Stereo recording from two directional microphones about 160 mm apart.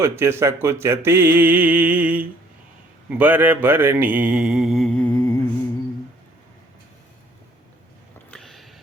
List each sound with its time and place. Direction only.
0.0 s speech: 15° right (ahead or behind); by 5.1 s 5° left (ahead or behind)
5.1 s music: 15° left (ahead or behind)
8.3 s a sound: centre (ahead or behind)